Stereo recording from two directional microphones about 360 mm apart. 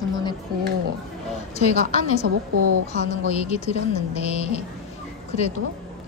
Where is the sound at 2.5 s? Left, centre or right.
Right.